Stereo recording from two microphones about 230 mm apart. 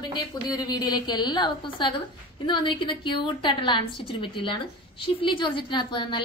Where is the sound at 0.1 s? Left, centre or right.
Centre.